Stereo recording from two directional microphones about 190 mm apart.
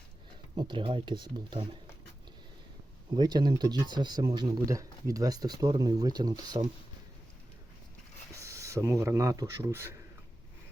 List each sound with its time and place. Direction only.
0.5 s speech: 25° right (ahead or behind)
3.2 s speech: 20° right (ahead or behind)
8.4 s speech: 15° right (ahead or behind)